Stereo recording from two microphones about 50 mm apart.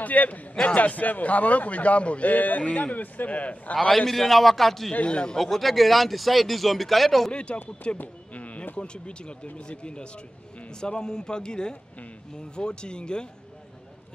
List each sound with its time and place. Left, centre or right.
0.0 s a man's voice: left
4.0 s speech: centre
4.9 s a man's voice: left
5.4 s speech: centre
8.0 s a man's voice: left